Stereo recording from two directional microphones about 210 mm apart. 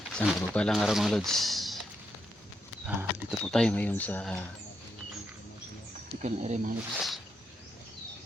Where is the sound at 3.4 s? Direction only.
5° left (ahead or behind).